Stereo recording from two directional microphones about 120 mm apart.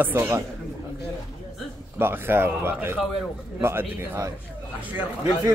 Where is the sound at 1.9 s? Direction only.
20° right (ahead or behind).